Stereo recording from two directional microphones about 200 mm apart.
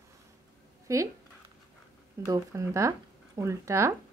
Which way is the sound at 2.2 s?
15° right (ahead or behind).